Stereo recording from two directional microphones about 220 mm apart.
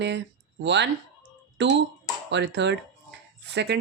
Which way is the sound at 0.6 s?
50° right (ahead or behind).